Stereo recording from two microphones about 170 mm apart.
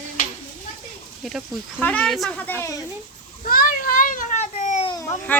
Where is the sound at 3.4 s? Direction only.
60° left (ahead or behind).